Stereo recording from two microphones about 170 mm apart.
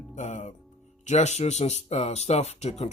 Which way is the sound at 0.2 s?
45° left (ahead or behind).